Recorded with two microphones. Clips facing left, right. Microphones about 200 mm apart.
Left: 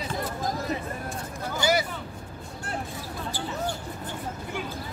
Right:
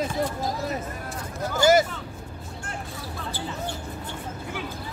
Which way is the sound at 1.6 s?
45° right (ahead or behind).